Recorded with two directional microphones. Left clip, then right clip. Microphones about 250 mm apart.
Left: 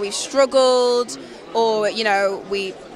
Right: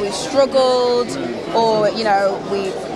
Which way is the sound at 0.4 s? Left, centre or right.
Left.